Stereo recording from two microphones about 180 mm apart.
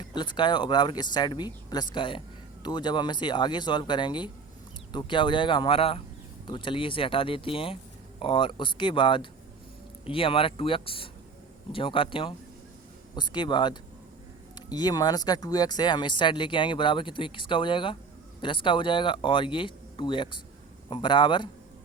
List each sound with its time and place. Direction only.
0.0 s speech: 25° left (ahead or behind)